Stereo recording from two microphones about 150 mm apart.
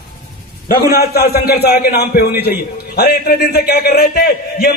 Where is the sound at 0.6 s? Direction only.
80° left.